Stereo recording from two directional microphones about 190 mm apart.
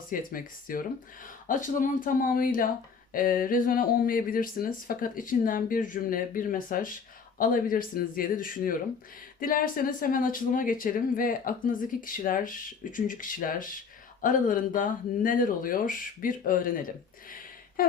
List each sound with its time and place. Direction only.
0.1 s speech: 45° left (ahead or behind)